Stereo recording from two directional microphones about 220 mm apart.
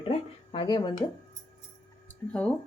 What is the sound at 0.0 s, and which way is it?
Speech, 25° left (ahead or behind).